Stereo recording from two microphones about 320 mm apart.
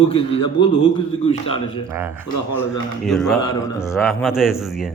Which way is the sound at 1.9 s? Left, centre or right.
Centre.